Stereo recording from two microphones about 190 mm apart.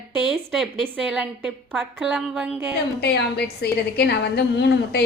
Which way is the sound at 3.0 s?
60° left (ahead or behind).